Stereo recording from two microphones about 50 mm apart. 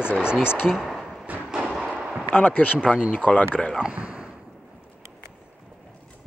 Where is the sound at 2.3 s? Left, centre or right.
Left.